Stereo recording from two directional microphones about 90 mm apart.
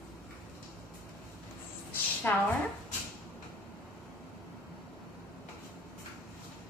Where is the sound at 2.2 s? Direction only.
20° left (ahead or behind).